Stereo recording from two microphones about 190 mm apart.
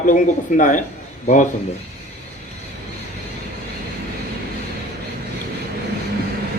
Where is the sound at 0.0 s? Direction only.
40° left (ahead or behind).